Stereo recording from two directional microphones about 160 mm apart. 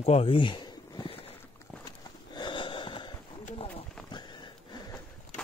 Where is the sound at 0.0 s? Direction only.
35° left (ahead or behind).